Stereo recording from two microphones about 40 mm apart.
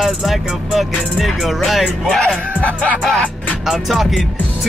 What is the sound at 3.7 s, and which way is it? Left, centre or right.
Music, centre.